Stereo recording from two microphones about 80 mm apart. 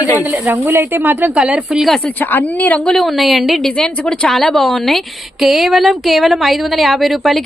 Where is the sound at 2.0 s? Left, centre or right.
Left.